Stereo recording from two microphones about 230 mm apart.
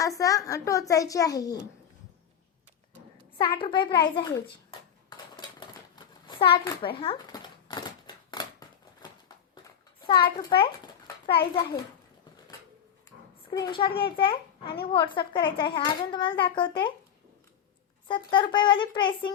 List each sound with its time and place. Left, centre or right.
0.0 s a child's voice: centre
3.3 s speech: left
5.0 s a sound: centre
10.1 s speech: left
10.6 s a sound: left
13.5 s a child's voice: left
18.1 s speech: left